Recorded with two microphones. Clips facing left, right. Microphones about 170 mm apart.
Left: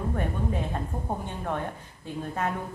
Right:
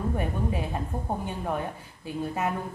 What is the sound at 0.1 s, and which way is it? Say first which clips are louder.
Speech: even; 10° right (ahead or behind).